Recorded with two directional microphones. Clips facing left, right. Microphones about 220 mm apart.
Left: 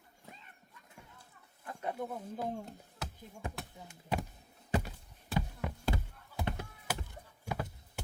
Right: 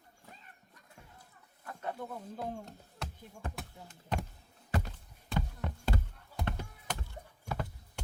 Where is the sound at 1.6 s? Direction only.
15° left (ahead or behind).